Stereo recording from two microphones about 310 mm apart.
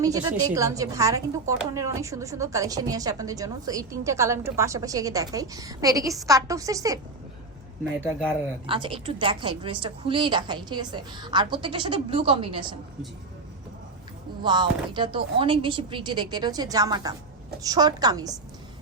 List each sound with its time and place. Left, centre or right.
0.0 s a woman's voice: centre
8.6 s a woman's voice: centre
14.4 s a woman's voice: centre